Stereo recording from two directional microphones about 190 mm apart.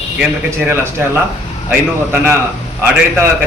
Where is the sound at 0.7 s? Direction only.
10° right (ahead or behind).